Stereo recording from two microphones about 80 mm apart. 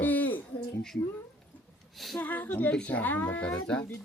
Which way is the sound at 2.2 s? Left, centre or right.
Left.